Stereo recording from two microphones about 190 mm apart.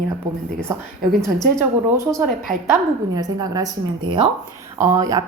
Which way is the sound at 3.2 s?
20° right (ahead or behind).